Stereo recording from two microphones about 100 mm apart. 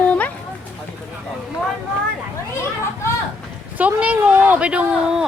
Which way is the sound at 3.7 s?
15° right (ahead or behind).